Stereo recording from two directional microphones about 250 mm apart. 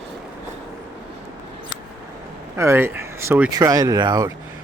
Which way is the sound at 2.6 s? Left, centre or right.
Centre.